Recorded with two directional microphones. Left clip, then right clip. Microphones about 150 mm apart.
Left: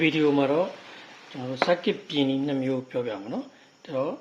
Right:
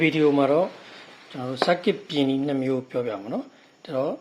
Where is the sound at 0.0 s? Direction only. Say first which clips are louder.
Right 2 dB; 25° right (ahead or behind).